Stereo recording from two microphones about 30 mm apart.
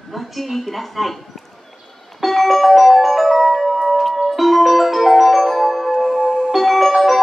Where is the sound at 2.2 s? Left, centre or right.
Centre.